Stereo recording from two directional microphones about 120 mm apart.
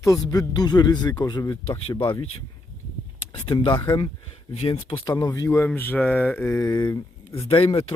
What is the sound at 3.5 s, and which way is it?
Speech, 40° left (ahead or behind).